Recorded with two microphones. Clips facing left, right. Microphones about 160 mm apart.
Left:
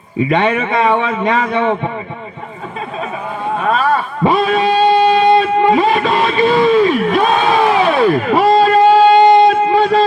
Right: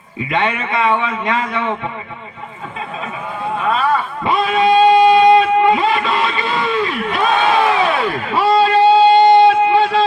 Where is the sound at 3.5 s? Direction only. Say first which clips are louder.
Left 2 dB; 40° left (ahead or behind).